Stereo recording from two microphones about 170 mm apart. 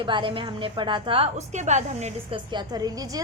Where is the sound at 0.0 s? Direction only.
30° right (ahead or behind).